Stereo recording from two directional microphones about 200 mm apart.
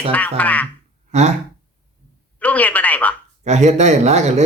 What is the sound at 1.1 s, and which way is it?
Speech, 35° right (ahead or behind).